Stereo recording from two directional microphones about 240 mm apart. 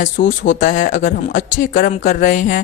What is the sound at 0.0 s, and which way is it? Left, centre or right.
Speech, left.